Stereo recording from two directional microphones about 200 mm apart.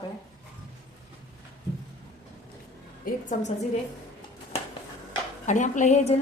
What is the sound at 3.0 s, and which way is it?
Speech, 40° left (ahead or behind).